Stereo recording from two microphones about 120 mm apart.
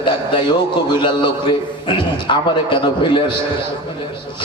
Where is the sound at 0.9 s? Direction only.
45° left (ahead or behind).